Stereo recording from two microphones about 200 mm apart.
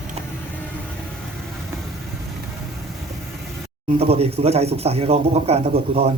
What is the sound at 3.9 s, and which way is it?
A man's voice, 30° right (ahead or behind).